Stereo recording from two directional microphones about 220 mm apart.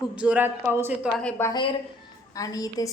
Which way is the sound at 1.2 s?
10° left (ahead or behind).